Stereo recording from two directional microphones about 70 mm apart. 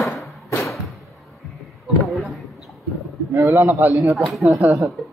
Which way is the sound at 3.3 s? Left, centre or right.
Right.